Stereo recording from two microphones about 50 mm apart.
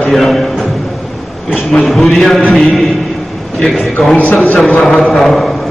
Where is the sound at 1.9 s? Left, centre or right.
Centre.